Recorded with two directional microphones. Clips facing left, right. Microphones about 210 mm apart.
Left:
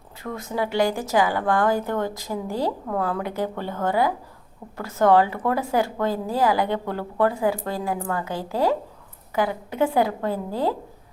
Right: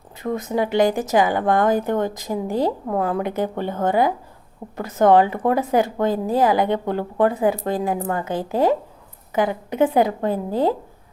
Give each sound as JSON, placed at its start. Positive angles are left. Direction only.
{"t": 0.2, "sound": "speech", "side_deg": -20}